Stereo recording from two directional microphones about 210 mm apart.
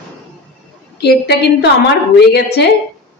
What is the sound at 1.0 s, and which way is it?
A woman's voice, 50° left (ahead or behind).